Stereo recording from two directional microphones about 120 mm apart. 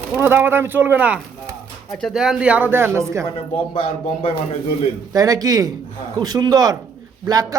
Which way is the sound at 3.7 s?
50° left (ahead or behind).